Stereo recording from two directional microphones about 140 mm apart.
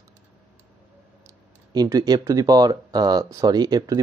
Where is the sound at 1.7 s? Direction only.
25° right (ahead or behind).